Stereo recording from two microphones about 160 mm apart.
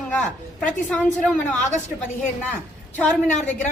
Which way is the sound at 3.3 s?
50° left (ahead or behind).